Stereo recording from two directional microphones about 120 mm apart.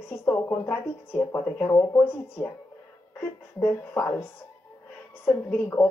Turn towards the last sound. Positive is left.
turn(degrees=20)  # may be behind; listen again after turning